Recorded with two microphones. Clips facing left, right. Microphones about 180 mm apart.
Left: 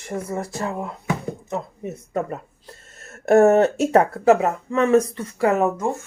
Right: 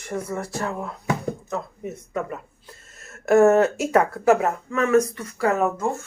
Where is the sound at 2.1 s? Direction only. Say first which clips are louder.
Left 4 dB; 35° left (ahead or behind).